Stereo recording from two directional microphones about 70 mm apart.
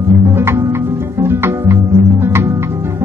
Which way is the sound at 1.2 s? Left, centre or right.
Right.